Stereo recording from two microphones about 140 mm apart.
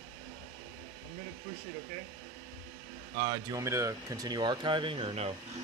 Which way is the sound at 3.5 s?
20° right (ahead or behind).